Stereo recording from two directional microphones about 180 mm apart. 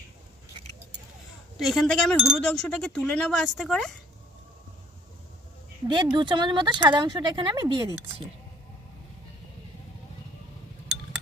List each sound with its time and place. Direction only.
1.5 s speech: centre (ahead or behind)
5.9 s speech: 25° right (ahead or behind)